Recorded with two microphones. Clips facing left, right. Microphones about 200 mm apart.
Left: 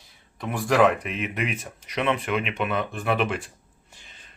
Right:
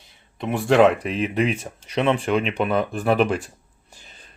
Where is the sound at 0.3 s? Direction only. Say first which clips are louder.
Right 4 dB; 25° right (ahead or behind).